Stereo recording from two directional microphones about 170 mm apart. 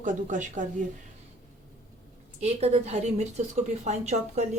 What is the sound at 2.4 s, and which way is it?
A woman's voice, 40° right (ahead or behind).